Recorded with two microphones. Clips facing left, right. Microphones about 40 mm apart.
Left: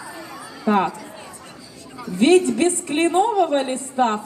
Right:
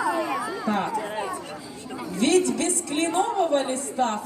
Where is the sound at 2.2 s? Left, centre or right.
Left.